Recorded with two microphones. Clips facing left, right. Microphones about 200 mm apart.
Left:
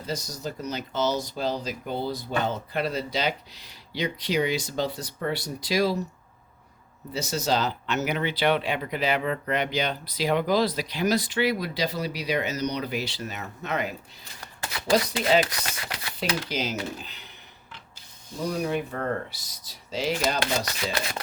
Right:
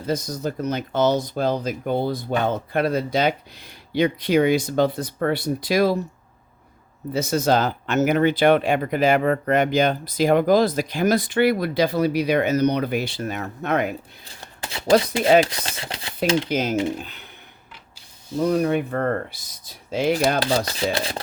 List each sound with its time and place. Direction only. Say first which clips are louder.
0.0 s speech: right 7 dB; 55° right (ahead or behind)
7.1 s speech: right 7 dB; 55° right (ahead or behind)
14.4 s a sound: right 2 dB; 25° right (ahead or behind)
15.4 s speech: right 3 dB; 30° right (ahead or behind)
16.5 s speech: right 8 dB; 50° right (ahead or behind)
18.3 s speech: right 8 dB; 55° right (ahead or behind)
20.7 s speech: right 6 dB; 30° right (ahead or behind)